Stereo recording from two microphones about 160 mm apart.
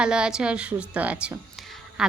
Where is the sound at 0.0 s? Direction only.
5° right (ahead or behind).